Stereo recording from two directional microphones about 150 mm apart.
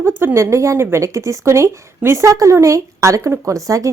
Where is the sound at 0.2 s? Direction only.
15° right (ahead or behind).